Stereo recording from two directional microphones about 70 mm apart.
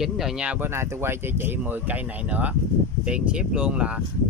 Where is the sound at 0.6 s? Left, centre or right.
Right.